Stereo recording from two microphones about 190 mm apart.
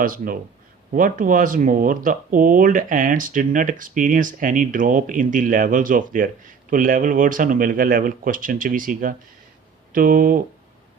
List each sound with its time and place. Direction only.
0.0 s speech: 45° right (ahead or behind)